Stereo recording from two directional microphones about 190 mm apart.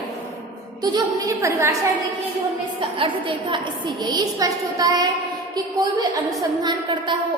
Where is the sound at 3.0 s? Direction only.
25° right (ahead or behind).